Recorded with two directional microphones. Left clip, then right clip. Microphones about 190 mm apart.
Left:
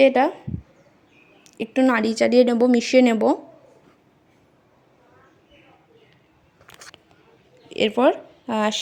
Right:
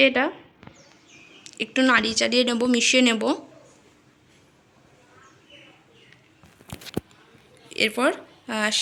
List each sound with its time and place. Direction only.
0.0 s speech: 30° left (ahead or behind)
1.5 s speech: 25° left (ahead or behind)
7.7 s speech: 30° left (ahead or behind)